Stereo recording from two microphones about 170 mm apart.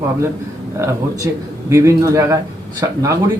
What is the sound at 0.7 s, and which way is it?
A man's voice, 15° right (ahead or behind).